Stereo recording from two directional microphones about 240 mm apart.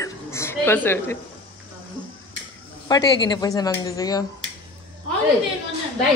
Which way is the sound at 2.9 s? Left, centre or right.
Centre.